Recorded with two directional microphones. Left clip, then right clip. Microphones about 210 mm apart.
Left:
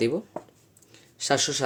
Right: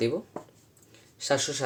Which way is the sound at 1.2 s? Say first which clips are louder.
Left 3 dB; 40° left (ahead or behind).